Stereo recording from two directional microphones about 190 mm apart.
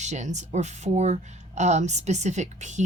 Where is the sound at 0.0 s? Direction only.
40° right (ahead or behind).